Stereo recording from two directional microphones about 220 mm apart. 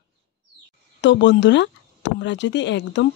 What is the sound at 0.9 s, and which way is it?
Speech, 55° left (ahead or behind).